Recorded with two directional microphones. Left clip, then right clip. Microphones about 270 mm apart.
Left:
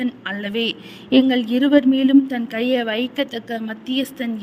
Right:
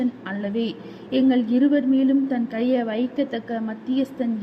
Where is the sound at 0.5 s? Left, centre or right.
Left.